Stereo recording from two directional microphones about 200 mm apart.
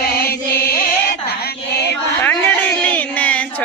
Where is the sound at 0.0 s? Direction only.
50° left (ahead or behind).